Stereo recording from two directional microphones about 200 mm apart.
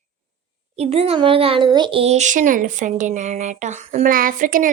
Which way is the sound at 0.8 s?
30° right (ahead or behind).